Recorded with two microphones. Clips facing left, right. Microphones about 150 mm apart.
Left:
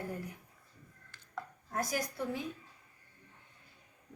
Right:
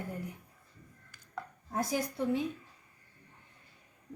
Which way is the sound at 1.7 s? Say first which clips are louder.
Right 3 dB; 20° right (ahead or behind).